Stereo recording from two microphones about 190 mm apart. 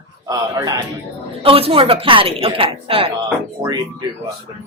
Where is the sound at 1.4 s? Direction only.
30° right (ahead or behind).